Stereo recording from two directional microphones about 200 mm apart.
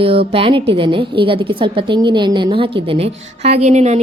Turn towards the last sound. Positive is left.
turn(degrees=-35)  # may be behind; listen again after turning